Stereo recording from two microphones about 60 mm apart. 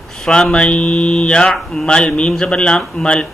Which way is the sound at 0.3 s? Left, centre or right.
Centre.